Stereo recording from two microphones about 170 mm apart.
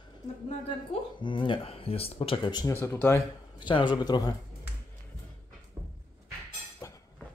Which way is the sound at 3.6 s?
25° left (ahead or behind).